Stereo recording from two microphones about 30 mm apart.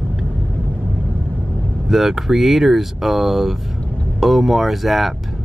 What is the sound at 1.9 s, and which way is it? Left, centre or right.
Speech, centre.